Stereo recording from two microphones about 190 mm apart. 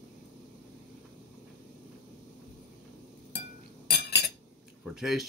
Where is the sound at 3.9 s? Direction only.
60° left (ahead or behind).